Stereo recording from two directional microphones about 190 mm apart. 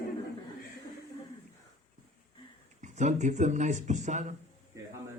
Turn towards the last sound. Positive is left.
turn(degrees=-40)  # may be behind; listen again after turning